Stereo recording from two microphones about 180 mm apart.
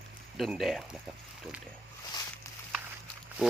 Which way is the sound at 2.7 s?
5° right (ahead or behind).